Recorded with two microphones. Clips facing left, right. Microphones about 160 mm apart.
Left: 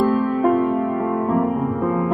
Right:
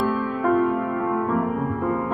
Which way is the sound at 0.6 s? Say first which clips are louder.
Left 2 dB; 30° left (ahead or behind).